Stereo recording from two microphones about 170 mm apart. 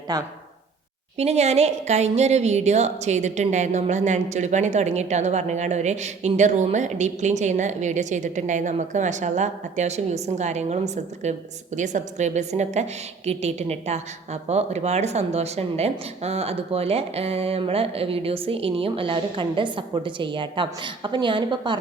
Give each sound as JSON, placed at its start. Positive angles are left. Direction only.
{"t": 0.1, "sound": "speech", "side_deg": -20}
{"t": 1.2, "sound": "a woman's voice", "side_deg": -40}